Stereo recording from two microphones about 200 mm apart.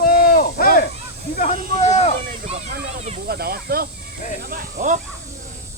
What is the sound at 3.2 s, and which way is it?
Speech, 50° right (ahead or behind).